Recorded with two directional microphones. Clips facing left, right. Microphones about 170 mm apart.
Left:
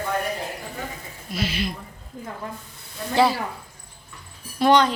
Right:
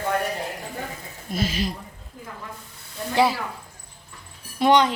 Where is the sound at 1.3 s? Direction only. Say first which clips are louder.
Right 1 dB; 45° right (ahead or behind).